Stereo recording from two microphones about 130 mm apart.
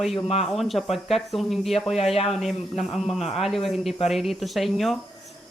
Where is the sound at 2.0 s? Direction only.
50° left (ahead or behind).